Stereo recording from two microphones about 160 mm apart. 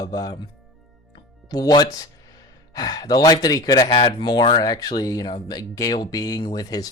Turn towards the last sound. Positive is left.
turn(degrees=25)  # may be behind; listen again after turning